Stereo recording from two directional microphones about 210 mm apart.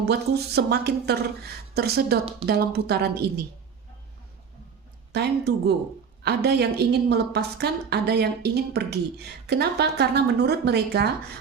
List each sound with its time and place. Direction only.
0.0 s a woman's voice: 50° right (ahead or behind)
5.1 s a woman's voice: 50° right (ahead or behind)